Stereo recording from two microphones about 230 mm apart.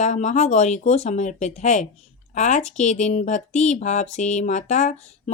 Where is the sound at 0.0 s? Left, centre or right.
Left.